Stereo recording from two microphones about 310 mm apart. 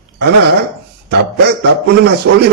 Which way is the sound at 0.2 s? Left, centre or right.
Right.